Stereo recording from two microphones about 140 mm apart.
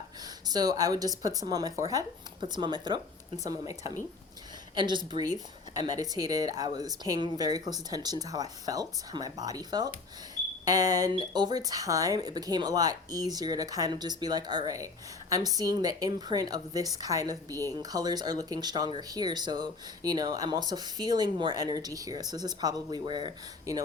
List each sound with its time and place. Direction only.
0.4 s speech: 30° right (ahead or behind)